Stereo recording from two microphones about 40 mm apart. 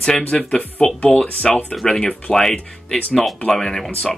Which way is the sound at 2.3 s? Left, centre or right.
Centre.